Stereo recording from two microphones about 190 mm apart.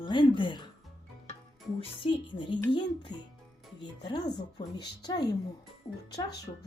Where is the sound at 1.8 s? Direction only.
25° left (ahead or behind).